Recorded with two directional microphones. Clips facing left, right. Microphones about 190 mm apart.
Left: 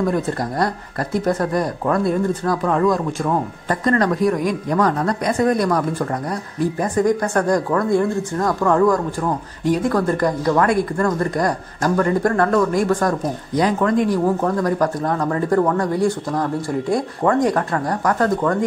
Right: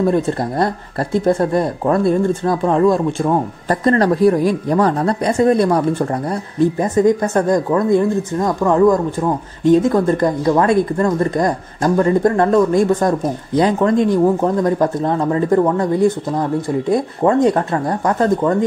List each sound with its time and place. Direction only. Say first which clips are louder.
0.0 s speech: right 4 dB; 25° right (ahead or behind)